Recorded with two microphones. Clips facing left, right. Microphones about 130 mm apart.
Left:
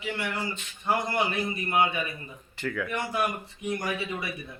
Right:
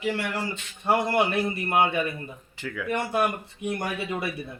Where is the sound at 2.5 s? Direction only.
10° right (ahead or behind).